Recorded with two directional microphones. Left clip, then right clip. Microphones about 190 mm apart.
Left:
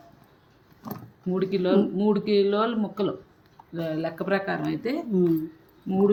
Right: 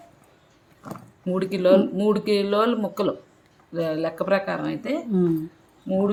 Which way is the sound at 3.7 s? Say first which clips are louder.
Right 5 dB; 35° right (ahead or behind).